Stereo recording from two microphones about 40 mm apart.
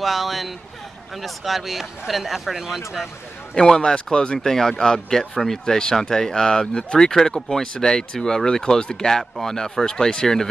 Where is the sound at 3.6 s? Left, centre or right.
Centre.